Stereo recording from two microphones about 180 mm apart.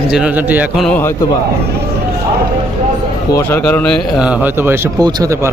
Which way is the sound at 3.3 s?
15° left (ahead or behind).